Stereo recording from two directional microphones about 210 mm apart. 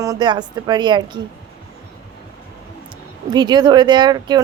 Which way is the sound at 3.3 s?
20° right (ahead or behind).